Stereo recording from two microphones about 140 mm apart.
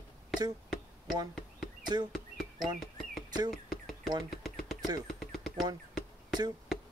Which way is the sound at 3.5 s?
Centre (ahead or behind).